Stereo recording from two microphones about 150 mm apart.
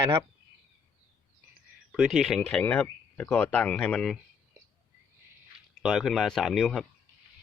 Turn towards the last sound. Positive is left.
turn(degrees=5)  # may be behind; listen again after turning